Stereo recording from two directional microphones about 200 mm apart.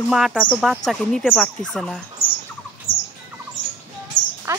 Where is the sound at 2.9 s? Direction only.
45° left (ahead or behind).